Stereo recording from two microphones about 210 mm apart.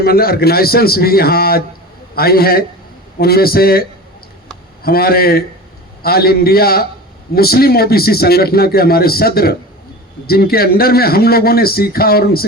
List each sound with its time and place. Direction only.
0.0 s a man's voice: 45° left (ahead or behind)